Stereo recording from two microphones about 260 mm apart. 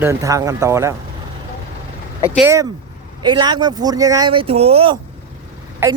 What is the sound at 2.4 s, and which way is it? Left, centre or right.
Speech, centre.